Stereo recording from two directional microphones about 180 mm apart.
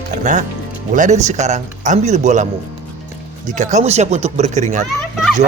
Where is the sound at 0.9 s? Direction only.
40° right (ahead or behind).